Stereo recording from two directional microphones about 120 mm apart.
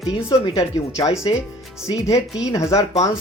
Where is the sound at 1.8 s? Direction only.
25° left (ahead or behind).